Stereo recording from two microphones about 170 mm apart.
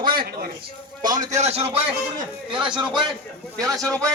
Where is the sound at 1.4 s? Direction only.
40° right (ahead or behind).